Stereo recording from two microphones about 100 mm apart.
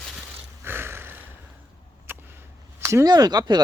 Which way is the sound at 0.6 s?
25° right (ahead or behind).